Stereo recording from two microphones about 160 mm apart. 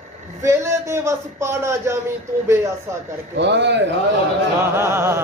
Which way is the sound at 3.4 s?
90° right.